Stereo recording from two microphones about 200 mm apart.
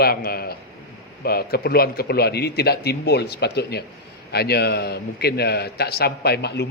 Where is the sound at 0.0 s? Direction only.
50° left (ahead or behind).